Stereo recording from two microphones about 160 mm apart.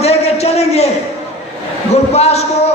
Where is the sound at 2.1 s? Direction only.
40° left (ahead or behind).